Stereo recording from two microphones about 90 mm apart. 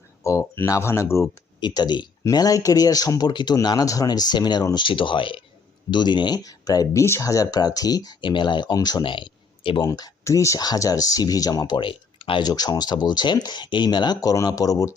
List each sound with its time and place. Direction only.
0.2 s speech: 35° left (ahead or behind)
1.6 s speech: 55° left (ahead or behind)
2.3 s speech: 45° left (ahead or behind)
4.9 s speech: 65° left (ahead or behind)
5.9 s speech: 55° left (ahead or behind)
7.0 s speech: 35° left (ahead or behind)
8.2 s speech: 60° left (ahead or behind)
9.8 s speech: 50° left (ahead or behind)
10.2 s speech: 35° left (ahead or behind)
10.6 s speech: 45° left (ahead or behind)
11.8 s speech: 70° left (ahead or behind)
12.4 s speech: 45° left (ahead or behind)